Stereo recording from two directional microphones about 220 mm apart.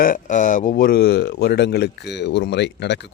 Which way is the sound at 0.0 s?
35° left (ahead or behind).